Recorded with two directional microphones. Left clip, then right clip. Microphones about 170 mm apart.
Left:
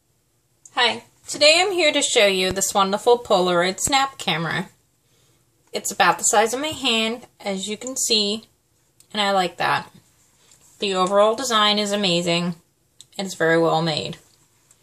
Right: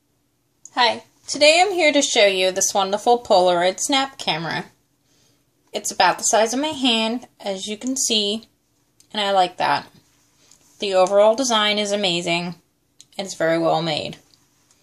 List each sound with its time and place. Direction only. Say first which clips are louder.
1.3 s speech: right 1 dB; 20° right (ahead or behind)
5.7 s speech: even; 25° right (ahead or behind)